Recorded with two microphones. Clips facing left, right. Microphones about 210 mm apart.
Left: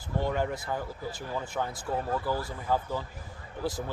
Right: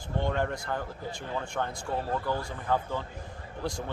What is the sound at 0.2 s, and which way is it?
Speech, 5° left (ahead or behind).